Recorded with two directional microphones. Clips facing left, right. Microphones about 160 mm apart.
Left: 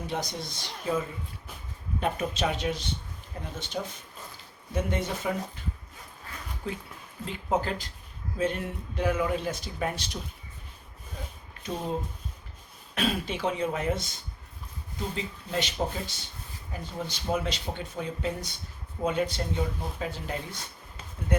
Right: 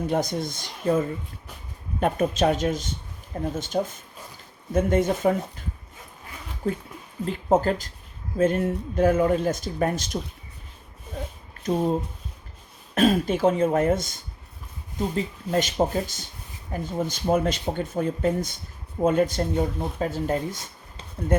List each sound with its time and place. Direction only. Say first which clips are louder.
0.1 s speech: right 7 dB; 50° right (ahead or behind)
6.6 s speech: right 9 dB; 45° right (ahead or behind)
11.6 s speech: right 9 dB; 45° right (ahead or behind)
12.9 s speech: right 9 dB; 45° right (ahead or behind)